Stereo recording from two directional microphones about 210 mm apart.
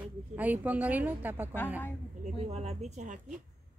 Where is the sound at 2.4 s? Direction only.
30° right (ahead or behind).